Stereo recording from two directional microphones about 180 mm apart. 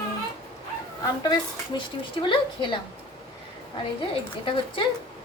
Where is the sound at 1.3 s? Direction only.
25° left (ahead or behind).